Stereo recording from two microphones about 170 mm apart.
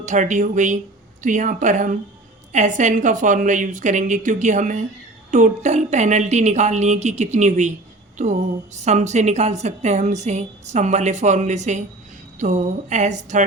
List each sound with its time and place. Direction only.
0.0 s a woman's voice: 45° right (ahead or behind)